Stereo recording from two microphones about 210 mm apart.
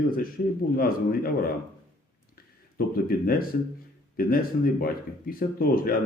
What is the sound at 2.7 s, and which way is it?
Speech, 45° left (ahead or behind).